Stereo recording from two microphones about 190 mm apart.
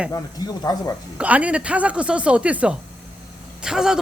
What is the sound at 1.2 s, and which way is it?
Speech, 5° right (ahead or behind).